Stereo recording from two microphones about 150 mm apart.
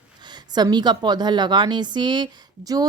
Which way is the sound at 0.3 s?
30° right (ahead or behind).